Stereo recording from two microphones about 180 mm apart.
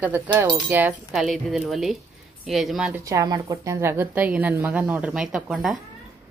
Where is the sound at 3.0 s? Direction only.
20° right (ahead or behind); by 5.7 s 5° right (ahead or behind).